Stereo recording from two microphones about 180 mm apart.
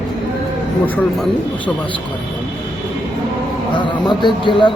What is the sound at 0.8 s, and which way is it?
Speech, 10° left (ahead or behind).